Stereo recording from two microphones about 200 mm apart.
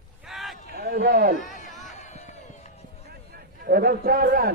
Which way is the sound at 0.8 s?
50° right (ahead or behind).